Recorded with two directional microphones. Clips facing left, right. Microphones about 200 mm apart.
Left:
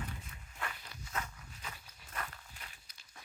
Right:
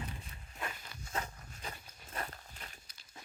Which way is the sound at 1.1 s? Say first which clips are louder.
Right 2 dB; 35° right (ahead or behind).